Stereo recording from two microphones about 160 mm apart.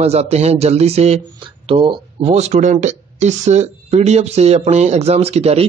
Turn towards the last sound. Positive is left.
turn(degrees=-40)  # may be behind; listen again after turning